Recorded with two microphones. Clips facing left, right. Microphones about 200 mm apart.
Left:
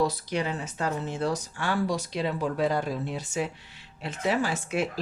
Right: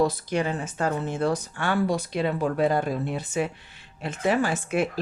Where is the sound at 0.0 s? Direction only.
50° right (ahead or behind).